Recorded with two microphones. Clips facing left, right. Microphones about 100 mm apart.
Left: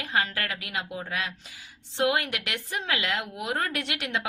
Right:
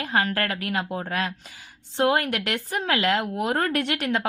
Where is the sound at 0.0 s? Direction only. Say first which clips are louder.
Right 4 dB; 45° right (ahead or behind).